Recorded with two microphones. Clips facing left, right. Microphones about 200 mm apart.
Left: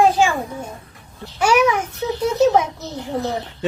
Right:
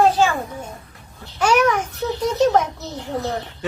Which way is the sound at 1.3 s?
10° left (ahead or behind).